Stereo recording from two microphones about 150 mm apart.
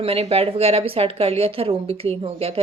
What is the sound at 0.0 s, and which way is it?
Speech, 40° right (ahead or behind).